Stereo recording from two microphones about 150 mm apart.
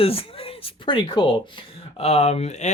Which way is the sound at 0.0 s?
40° left (ahead or behind).